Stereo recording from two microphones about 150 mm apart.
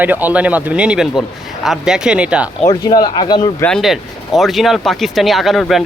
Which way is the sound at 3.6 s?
Centre (ahead or behind).